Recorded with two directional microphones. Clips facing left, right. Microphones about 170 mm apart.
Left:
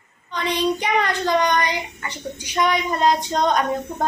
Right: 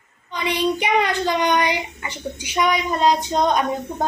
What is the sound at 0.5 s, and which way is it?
A woman's voice, 10° right (ahead or behind).